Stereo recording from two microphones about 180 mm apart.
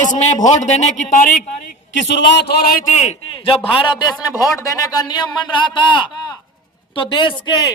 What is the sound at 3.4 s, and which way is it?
Speech, 30° left (ahead or behind).